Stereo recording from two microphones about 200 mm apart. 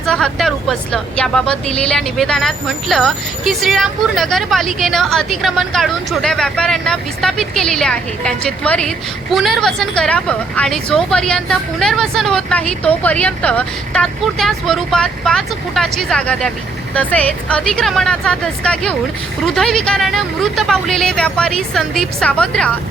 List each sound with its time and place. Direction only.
0.0 s speech: 5° left (ahead or behind)